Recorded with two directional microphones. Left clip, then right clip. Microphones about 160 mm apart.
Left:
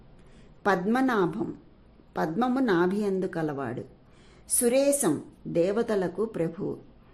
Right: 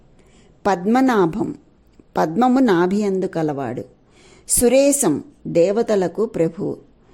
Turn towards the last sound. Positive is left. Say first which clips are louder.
# right 9 dB
turn(degrees=-35)  # may be behind; listen again after turning